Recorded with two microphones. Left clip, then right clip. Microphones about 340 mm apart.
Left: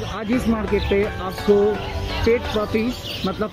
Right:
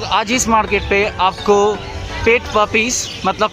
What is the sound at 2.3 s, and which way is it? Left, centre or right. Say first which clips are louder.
Speech: right 7 dB; right.